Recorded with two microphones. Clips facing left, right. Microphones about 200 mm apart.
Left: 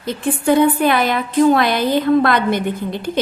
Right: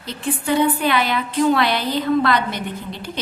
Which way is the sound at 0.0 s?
50° left (ahead or behind).